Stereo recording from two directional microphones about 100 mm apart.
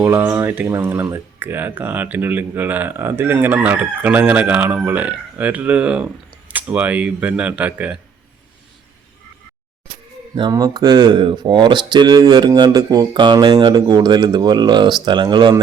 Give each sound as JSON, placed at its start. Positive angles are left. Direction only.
{"t": 0.2, "sound": "speech", "side_deg": -30}
{"t": 3.3, "sound": "chicken", "side_deg": -15}
{"t": 10.5, "sound": "speech", "side_deg": -40}